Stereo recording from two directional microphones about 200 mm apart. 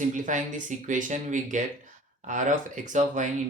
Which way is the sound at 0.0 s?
40° right (ahead or behind).